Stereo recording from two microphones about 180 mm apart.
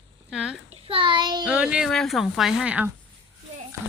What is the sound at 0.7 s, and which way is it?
Speech, 30° right (ahead or behind).